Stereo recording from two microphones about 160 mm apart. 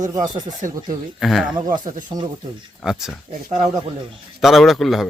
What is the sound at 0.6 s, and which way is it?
Speech, 55° right (ahead or behind).